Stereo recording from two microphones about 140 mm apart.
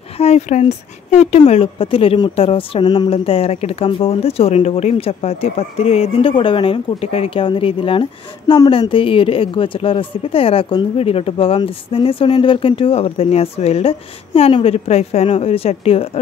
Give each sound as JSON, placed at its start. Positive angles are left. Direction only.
{"t": 0.2, "sound": "speech", "side_deg": 50}